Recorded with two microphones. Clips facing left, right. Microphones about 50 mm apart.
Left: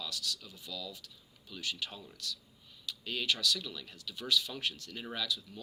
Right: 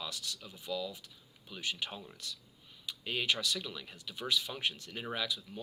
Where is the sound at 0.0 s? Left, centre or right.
Right.